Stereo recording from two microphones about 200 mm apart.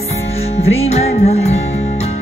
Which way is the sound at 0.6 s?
30° left (ahead or behind).